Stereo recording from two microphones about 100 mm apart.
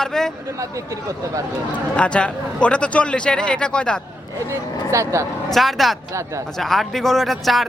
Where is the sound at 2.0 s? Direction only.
10° left (ahead or behind).